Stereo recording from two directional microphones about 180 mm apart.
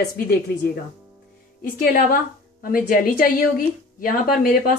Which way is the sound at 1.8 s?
50° left (ahead or behind).